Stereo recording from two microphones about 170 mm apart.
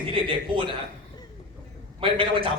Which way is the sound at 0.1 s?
30° right (ahead or behind).